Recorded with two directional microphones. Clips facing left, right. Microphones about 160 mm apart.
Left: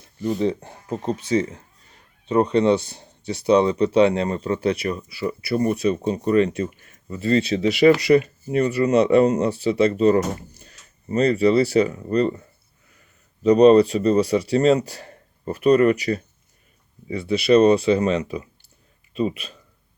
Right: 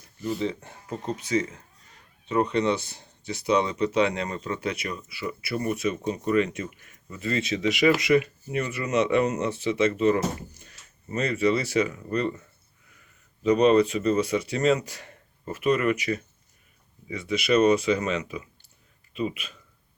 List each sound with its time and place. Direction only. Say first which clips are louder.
0.2 s speech: left 6 dB; 40° left (ahead or behind)
13.4 s speech: left 6 dB; 35° left (ahead or behind)